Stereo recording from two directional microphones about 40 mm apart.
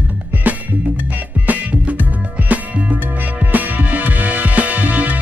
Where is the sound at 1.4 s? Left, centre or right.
Right.